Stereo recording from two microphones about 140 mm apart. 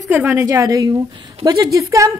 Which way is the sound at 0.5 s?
25° right (ahead or behind).